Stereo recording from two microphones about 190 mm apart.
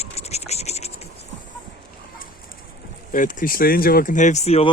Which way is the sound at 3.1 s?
45° left (ahead or behind).